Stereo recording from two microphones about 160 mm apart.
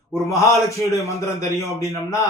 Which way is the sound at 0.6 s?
20° left (ahead or behind).